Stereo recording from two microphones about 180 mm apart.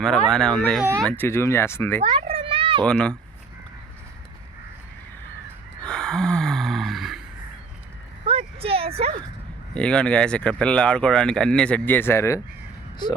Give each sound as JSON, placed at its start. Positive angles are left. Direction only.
{"t": 0.3, "sound": "speech", "side_deg": 5}
{"t": 2.0, "sound": "a sound", "side_deg": -30}
{"t": 2.8, "sound": "speech", "side_deg": 5}
{"t": 5.8, "sound": "gasp", "side_deg": 5}
{"t": 8.3, "sound": "a sound", "side_deg": -30}
{"t": 9.7, "sound": "speech", "side_deg": 5}